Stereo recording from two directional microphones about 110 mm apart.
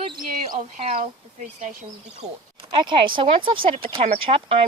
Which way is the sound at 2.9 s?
50° right (ahead or behind).